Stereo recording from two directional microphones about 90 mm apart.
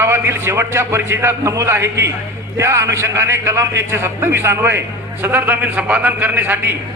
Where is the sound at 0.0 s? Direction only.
30° right (ahead or behind).